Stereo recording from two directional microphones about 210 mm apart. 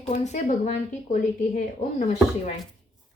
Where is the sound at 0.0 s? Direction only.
35° left (ahead or behind).